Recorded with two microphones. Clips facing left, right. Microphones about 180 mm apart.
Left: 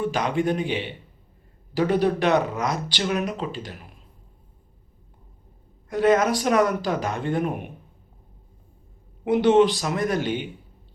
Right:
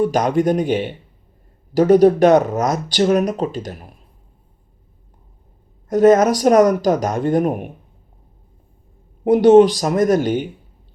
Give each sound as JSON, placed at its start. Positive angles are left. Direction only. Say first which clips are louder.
{"t": 0.0, "sound": "speech", "louder": "right 7 dB", "side_deg": -40}
{"t": 5.9, "sound": "speech", "louder": "right 7 dB", "side_deg": -45}
{"t": 9.2, "sound": "speech", "louder": "right 8 dB", "side_deg": -40}